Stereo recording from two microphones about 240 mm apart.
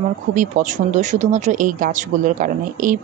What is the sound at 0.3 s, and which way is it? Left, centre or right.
A woman's voice, right.